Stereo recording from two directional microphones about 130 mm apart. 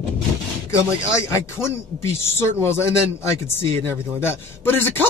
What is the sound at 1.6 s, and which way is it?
Speech, 20° left (ahead or behind).